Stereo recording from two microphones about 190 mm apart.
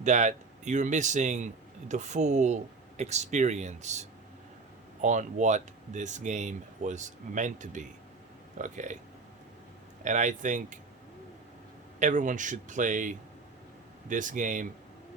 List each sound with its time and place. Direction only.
0.0 s speech: 40° right (ahead or behind)
10.0 s speech: 40° right (ahead or behind)
11.9 s speech: 40° right (ahead or behind)